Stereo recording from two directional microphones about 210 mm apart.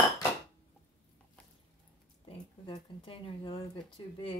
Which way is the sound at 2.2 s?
25° left (ahead or behind).